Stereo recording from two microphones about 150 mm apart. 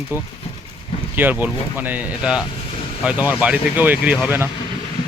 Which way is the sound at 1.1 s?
10° right (ahead or behind).